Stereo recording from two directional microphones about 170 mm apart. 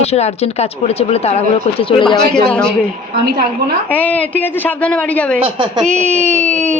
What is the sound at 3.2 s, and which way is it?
Speech, 70° right (ahead or behind).